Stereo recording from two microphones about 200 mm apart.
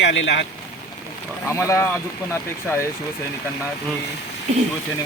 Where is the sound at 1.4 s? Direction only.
15° left (ahead or behind).